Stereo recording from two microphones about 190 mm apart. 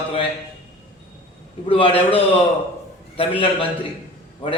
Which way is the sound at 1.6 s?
30° left (ahead or behind).